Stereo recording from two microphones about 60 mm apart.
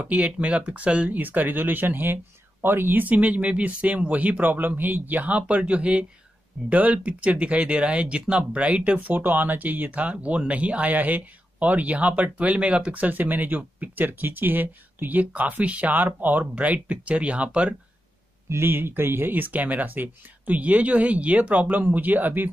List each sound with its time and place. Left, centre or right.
0.0 s speech: right
18.5 s speech: right